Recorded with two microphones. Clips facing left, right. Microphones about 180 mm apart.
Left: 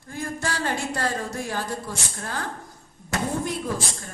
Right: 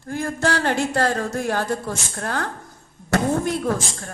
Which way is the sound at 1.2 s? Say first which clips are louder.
Right 6 dB; 60° right (ahead or behind).